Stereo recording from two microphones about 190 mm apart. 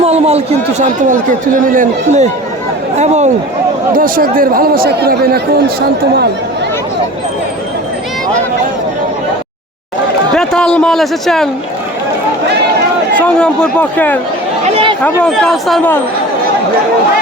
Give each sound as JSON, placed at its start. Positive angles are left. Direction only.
{"t": 0.0, "sound": "speech", "side_deg": -30}
{"t": 3.9, "sound": "speech", "side_deg": -45}
{"t": 10.3, "sound": "a man's voice", "side_deg": 5}
{"t": 13.1, "sound": "speech", "side_deg": 5}
{"t": 14.6, "sound": "a sound", "side_deg": -30}
{"t": 15.0, "sound": "speech", "side_deg": 5}